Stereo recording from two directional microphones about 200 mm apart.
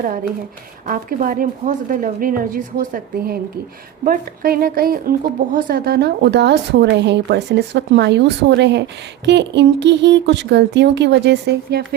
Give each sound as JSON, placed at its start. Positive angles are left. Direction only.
{"t": 0.9, "sound": "speech", "side_deg": -40}